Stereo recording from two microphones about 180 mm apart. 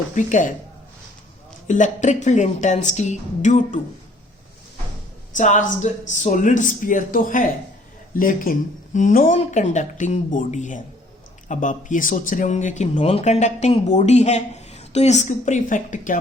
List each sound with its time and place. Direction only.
0.1 s speech: 45° left (ahead or behind)
1.6 s speech: 45° left (ahead or behind)
5.4 s speech: 45° left (ahead or behind)